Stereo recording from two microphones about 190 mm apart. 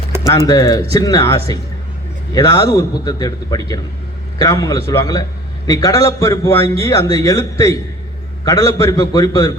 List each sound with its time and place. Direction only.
0.3 s a man's voice: 20° left (ahead or behind)